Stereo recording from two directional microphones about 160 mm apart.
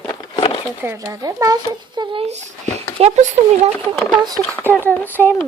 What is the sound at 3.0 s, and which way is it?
Speech, 40° right (ahead or behind).